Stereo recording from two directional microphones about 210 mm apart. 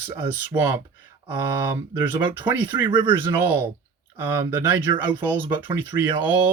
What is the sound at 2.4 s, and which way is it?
Speech, 10° right (ahead or behind).